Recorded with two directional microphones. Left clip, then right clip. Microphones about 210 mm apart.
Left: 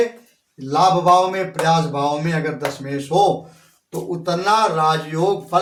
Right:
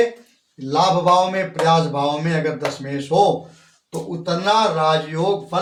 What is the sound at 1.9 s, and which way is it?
Speech, 20° left (ahead or behind).